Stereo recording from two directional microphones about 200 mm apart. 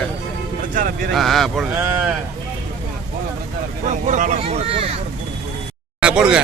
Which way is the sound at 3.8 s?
35° right (ahead or behind).